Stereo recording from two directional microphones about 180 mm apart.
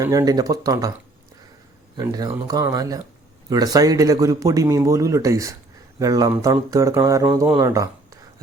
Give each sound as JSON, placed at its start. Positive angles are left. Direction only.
{"t": 0.0, "sound": "speech", "side_deg": -20}
{"t": 2.0, "sound": "speech", "side_deg": -20}